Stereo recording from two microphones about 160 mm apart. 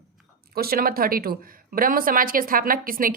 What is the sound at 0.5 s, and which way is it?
Speech, 70° right (ahead or behind).